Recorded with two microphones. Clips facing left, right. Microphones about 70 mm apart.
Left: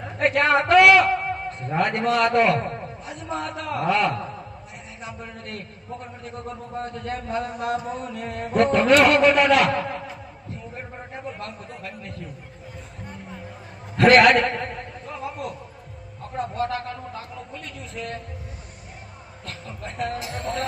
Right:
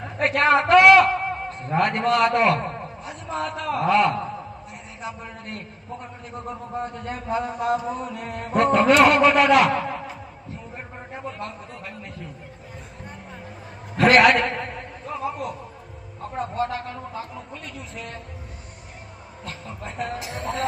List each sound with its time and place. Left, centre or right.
0.2 s a man's voice: centre
10.8 s a sound: centre
11.3 s a man's voice: centre
13.9 s speech: centre
15.1 s a sound: centre
17.9 s speech: centre
19.5 s speech: centre
20.1 s speech: right